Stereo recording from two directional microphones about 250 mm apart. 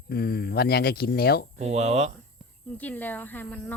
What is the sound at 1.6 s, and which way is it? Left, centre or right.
Speech, right.